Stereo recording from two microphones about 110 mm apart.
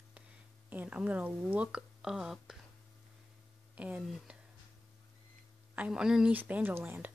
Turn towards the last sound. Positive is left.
turn(degrees=-20)  # may be behind; listen again after turning